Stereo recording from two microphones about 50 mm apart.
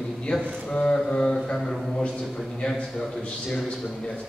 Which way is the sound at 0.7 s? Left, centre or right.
Centre.